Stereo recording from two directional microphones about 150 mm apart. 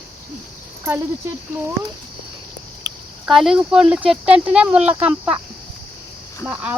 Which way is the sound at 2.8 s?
25° right (ahead or behind).